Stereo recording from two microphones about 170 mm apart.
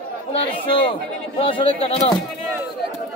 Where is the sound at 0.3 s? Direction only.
35° left (ahead or behind).